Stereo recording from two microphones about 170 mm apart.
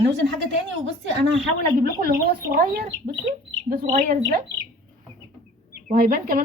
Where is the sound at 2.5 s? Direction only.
60° right (ahead or behind).